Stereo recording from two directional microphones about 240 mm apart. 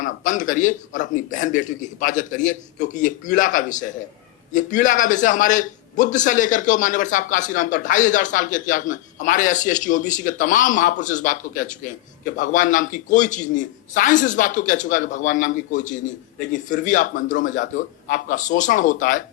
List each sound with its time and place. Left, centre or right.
0.0 s a man's voice: left